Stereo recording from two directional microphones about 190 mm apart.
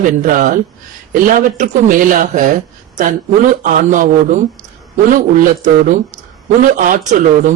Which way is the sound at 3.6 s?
45° right (ahead or behind).